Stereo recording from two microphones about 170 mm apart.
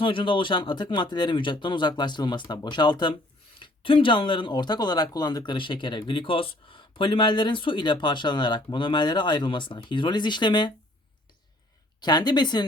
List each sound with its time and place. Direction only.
0.0 s speech: 30° left (ahead or behind)
11.9 s speech: 25° left (ahead or behind)